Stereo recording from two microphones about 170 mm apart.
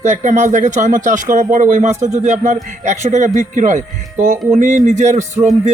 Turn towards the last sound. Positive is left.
turn(degrees=-45)  # may be behind; listen again after turning